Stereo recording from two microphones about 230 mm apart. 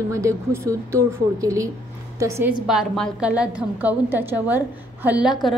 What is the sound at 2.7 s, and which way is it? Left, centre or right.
A woman's voice, centre.